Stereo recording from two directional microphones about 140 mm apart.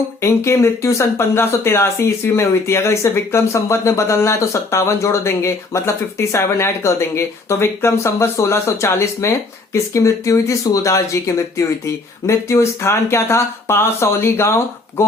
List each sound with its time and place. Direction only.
0.2 s speech: 20° left (ahead or behind)